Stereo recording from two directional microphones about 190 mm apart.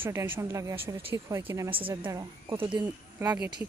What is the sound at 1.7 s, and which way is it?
Speech, 30° right (ahead or behind).